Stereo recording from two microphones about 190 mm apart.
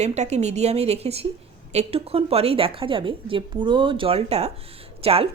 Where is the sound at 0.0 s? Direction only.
35° right (ahead or behind).